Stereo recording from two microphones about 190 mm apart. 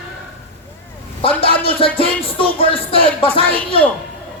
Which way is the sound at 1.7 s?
30° left (ahead or behind).